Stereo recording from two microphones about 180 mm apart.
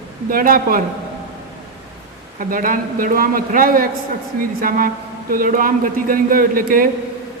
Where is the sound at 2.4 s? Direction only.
50° right (ahead or behind).